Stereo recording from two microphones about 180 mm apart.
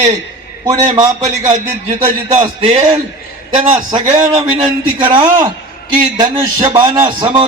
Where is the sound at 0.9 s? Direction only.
20° right (ahead or behind).